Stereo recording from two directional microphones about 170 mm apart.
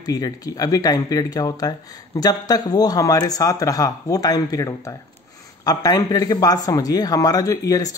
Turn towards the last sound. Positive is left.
turn(degrees=20)  # may be behind; listen again after turning